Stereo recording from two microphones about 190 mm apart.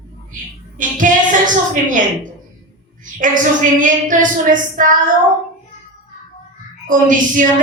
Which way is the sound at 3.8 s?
45° right (ahead or behind).